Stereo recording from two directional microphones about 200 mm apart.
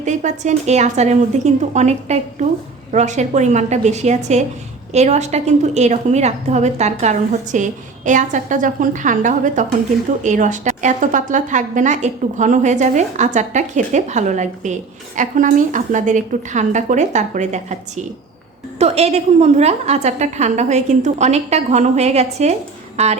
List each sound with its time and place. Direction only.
0.0 s a woman's voice: 35° right (ahead or behind)